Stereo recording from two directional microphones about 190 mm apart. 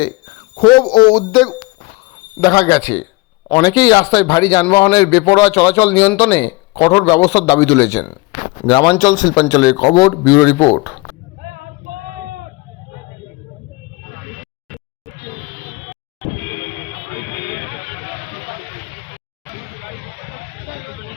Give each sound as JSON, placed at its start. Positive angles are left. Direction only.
{"t": 0.5, "sound": "a man's voice", "side_deg": 25}